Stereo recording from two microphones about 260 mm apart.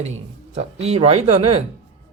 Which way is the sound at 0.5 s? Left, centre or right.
Right.